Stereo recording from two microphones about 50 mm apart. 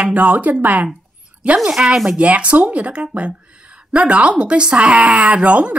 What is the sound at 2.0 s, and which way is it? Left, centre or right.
Speech, right.